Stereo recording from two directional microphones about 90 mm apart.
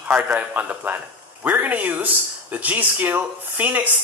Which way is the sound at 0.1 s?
20° right (ahead or behind).